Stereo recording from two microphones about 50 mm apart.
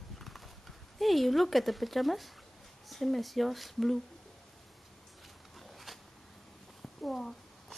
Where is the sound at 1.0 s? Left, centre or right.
Centre.